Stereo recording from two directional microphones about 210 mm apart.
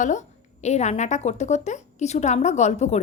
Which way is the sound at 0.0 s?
35° left (ahead or behind).